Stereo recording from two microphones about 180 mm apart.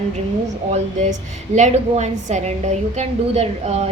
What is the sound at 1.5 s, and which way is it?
A woman's voice, 40° right (ahead or behind).